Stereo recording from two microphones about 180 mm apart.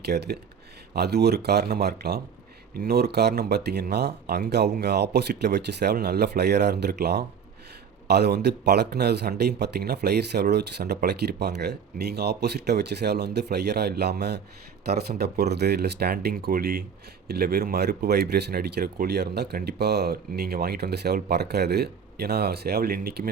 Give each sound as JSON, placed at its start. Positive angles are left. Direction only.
{"t": 0.0, "sound": "speech", "side_deg": -65}